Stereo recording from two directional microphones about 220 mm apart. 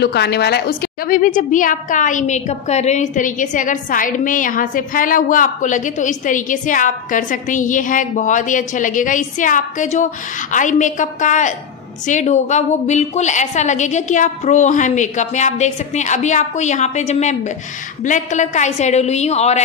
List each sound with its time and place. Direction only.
0.0 s a woman's voice: 50° left (ahead or behind); by 19.6 s 30° left (ahead or behind)